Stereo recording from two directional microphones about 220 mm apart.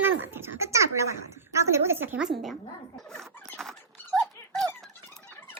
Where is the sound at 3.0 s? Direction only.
Centre (ahead or behind).